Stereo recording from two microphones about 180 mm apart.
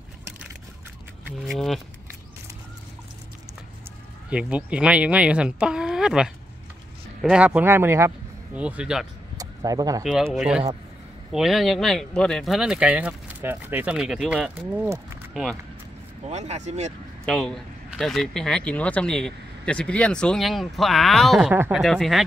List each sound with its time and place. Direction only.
1.4 s speech: centre (ahead or behind)
4.3 s speech: 5° right (ahead or behind)
9.4 s speech: 20° right (ahead or behind)
10.0 s speech: centre (ahead or behind)
16.3 s speech: 40° right (ahead or behind)
17.3 s speech: centre (ahead or behind)